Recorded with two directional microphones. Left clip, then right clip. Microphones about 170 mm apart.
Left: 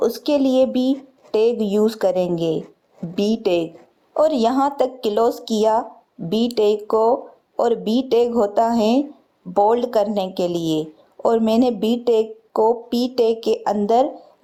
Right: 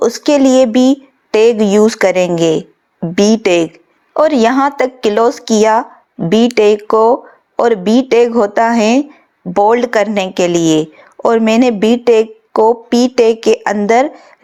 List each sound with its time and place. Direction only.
0.0 s speech: 35° right (ahead or behind)
10.6 s a woman's voice: 90° right
11.2 s speech: 30° right (ahead or behind)